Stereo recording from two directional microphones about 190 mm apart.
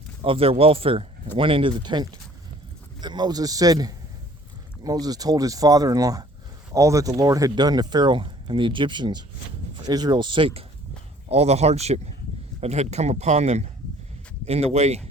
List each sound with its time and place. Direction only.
0.2 s speech: 30° right (ahead or behind)